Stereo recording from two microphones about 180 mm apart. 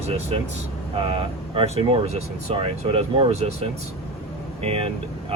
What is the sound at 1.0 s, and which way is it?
Speech, 30° right (ahead or behind).